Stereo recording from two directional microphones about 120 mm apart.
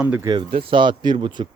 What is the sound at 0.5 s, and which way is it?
Speech, 45° right (ahead or behind).